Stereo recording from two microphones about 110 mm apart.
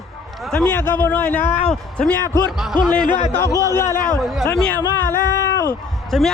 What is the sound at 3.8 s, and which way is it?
Speech, 20° left (ahead or behind).